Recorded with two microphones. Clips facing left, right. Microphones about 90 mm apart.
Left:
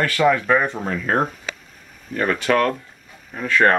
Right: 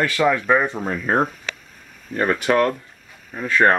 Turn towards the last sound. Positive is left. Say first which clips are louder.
# even
turn(degrees=-10)  # may be behind; listen again after turning